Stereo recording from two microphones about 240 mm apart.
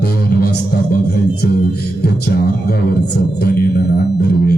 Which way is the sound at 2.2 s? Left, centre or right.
Left.